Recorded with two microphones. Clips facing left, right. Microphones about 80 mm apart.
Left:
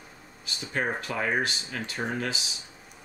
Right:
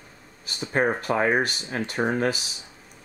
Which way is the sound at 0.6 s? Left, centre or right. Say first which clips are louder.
Right 6 dB; right.